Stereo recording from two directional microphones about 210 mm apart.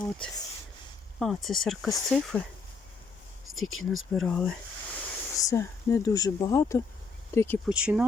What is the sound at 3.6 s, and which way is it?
Speech, 75° left (ahead or behind).